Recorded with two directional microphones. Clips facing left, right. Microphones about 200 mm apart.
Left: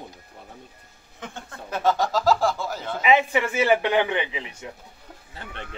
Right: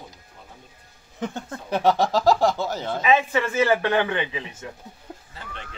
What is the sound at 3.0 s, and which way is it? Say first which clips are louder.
Speech: left 1 dB; 15° left (ahead or behind).